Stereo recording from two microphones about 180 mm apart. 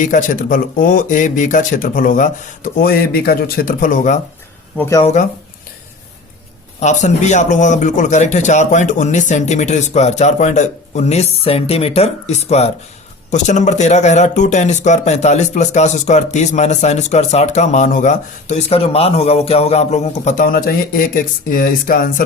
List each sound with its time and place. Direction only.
0.0 s speech: 45° left (ahead or behind)
4.8 s speech: 20° left (ahead or behind)
5.0 s speech: 45° left (ahead or behind)
6.7 s speech: 40° left (ahead or behind)